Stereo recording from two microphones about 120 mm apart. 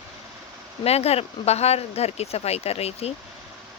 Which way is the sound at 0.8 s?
60° left (ahead or behind).